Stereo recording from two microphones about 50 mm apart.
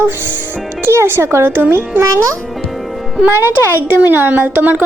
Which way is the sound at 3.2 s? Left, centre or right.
Right.